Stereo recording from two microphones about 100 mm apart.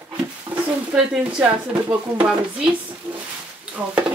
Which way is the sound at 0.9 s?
10° right (ahead or behind).